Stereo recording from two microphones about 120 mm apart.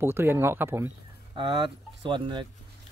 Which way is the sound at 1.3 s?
40° right (ahead or behind).